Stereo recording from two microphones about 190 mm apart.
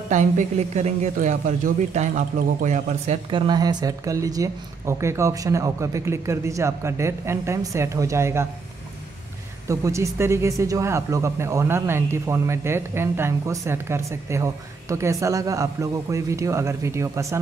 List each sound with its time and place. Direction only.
0.1 s a man's voice: 40° right (ahead or behind)
3.3 s speech: 25° right (ahead or behind)
9.7 s speech: 15° right (ahead or behind)